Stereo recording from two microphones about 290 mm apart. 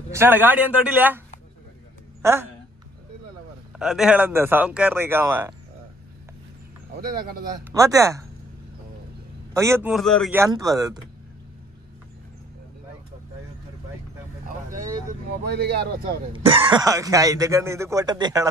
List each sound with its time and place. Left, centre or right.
0.1 s speech: centre
2.2 s speech: centre
3.7 s speech: centre
7.7 s speech: centre
9.5 s speech: centre
10.4 s speech: centre
14.7 s vehicle: right
15.4 s speech: right
16.4 s speech: centre